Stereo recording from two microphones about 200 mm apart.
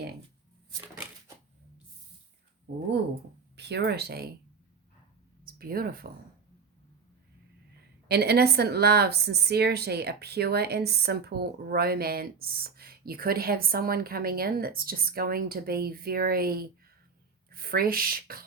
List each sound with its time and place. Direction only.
3.5 s speech: 60° right (ahead or behind)
5.5 s speech: 50° right (ahead or behind)
8.0 s speech: 55° right (ahead or behind)